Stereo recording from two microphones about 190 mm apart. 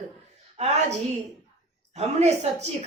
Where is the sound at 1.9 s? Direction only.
35° right (ahead or behind).